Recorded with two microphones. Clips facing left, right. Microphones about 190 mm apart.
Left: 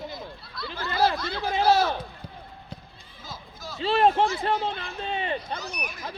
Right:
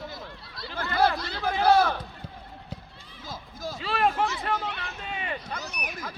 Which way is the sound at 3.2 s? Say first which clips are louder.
Right 4 dB; 50° right (ahead or behind).